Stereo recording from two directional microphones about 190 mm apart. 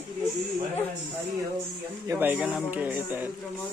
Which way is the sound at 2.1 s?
10° right (ahead or behind).